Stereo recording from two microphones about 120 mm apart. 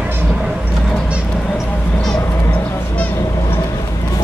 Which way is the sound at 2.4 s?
15° left (ahead or behind).